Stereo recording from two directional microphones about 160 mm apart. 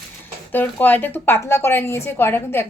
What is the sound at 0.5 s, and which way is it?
A woman's voice, 10° left (ahead or behind).